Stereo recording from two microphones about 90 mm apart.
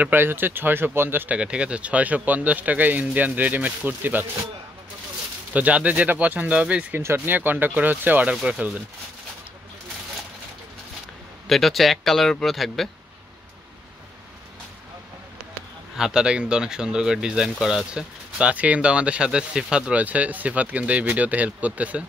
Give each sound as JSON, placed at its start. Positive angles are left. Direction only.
{"t": 0.0, "sound": "speech", "side_deg": -25}
{"t": 1.4, "sound": "speech", "side_deg": -10}
{"t": 5.5, "sound": "speech", "side_deg": -15}
{"t": 7.0, "sound": "speech", "side_deg": -25}
{"t": 11.4, "sound": "speech", "side_deg": 5}
{"t": 16.0, "sound": "speech", "side_deg": -10}